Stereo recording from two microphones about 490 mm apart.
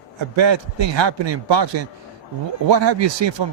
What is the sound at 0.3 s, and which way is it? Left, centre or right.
Speech, right.